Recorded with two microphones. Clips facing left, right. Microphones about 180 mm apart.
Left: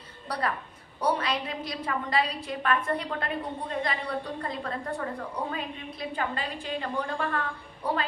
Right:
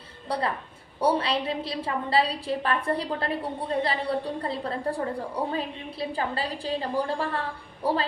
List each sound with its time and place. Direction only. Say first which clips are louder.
0.3 s a woman's voice: right 2 dB; 25° right (ahead or behind)